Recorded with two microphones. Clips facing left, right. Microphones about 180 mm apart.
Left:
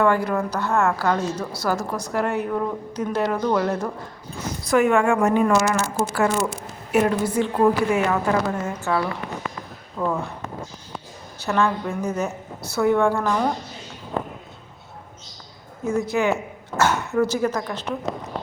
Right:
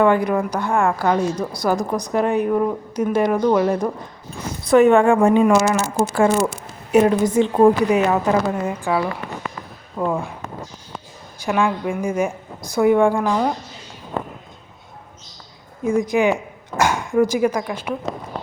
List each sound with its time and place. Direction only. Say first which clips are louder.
0.0 s a woman's voice: right 4 dB; 20° right (ahead or behind)
4.7 s speech: right 5 dB; 30° right (ahead or behind)
5.3 s a woman's voice: right 4 dB; 20° right (ahead or behind)
11.3 s a woman's voice: right 2 dB; 10° right (ahead or behind)
15.8 s speech: right 4 dB; 15° right (ahead or behind)